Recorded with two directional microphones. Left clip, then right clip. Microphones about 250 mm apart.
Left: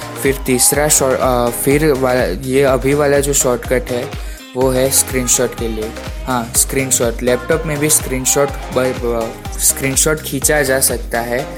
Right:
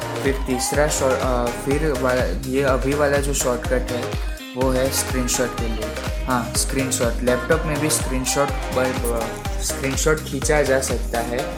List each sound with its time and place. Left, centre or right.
0.4 s speech: left
9.9 s speech: left